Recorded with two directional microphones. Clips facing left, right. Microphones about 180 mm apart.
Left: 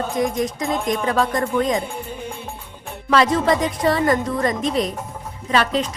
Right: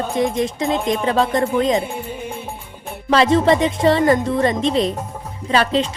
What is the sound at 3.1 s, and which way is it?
Speech, 25° right (ahead or behind).